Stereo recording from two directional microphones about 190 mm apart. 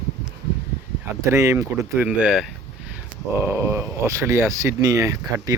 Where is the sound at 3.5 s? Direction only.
15° right (ahead or behind).